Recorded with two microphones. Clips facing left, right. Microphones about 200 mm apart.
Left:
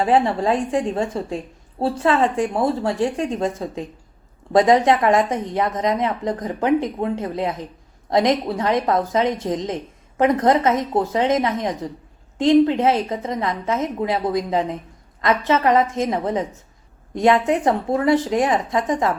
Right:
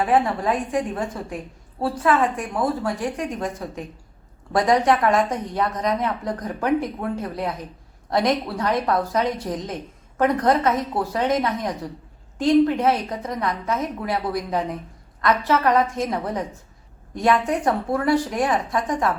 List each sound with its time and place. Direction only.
0.0 s speech: 25° left (ahead or behind)